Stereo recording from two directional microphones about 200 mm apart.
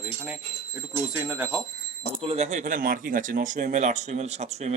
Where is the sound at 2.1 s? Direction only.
30° right (ahead or behind).